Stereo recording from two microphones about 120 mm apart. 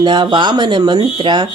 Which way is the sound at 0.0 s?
40° right (ahead or behind).